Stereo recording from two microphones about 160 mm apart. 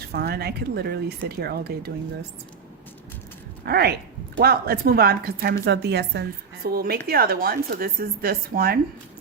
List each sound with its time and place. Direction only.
0.1 s speech: 75° right (ahead or behind)
3.7 s speech: 80° right
4.4 s a woman's voice: 70° right (ahead or behind)
5.6 s a woman's voice: 90° right; by 8.8 s 70° right (ahead or behind)